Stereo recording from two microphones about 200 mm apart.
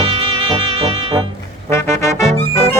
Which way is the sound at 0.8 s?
30° right (ahead or behind).